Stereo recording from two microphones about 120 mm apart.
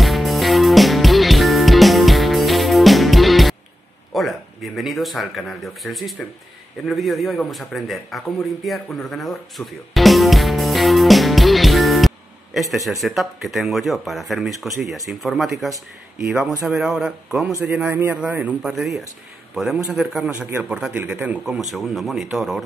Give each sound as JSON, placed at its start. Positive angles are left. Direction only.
{"t": 0.0, "sound": "music", "side_deg": 0}
{"t": 4.1, "sound": "speech", "side_deg": 0}
{"t": 8.6, "sound": "music", "side_deg": 0}
{"t": 13.0, "sound": "a man's voice", "side_deg": 0}
{"t": 20.3, "sound": "a man's voice", "side_deg": -15}
{"t": 20.6, "sound": "a man's voice", "side_deg": -5}